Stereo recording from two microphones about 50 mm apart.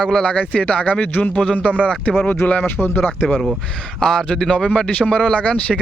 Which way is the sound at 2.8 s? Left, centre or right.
Left.